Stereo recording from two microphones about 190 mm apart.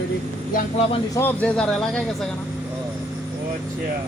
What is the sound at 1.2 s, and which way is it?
Speech, 10° left (ahead or behind).